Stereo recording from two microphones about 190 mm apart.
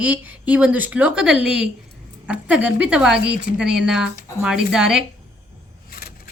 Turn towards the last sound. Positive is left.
turn(degrees=50)  # may be behind; listen again after turning